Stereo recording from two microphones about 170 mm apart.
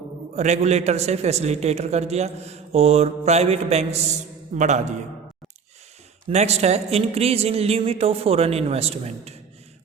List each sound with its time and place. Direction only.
0.3 s a man's voice: 40° right (ahead or behind)
6.2 s a man's voice: 40° right (ahead or behind)